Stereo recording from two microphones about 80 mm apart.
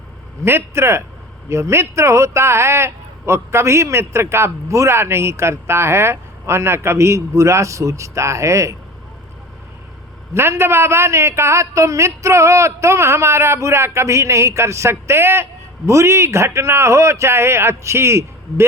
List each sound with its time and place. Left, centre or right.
0.4 s a man's voice: right
10.3 s a man's voice: right